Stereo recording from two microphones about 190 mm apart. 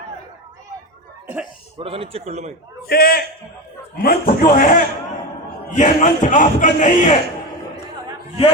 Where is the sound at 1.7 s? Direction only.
30° right (ahead or behind).